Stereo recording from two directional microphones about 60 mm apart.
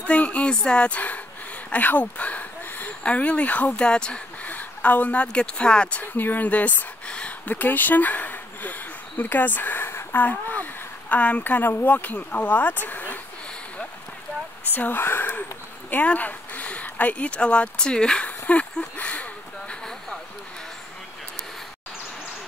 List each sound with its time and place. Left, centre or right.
0.0 s speech: left
4.5 s speech: left
6.1 s speech: left
14.7 s speech: left